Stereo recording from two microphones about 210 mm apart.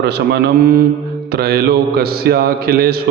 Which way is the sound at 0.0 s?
50° right (ahead or behind).